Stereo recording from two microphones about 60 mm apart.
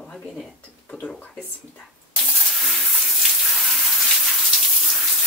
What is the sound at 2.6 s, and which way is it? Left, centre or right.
Water tap, centre.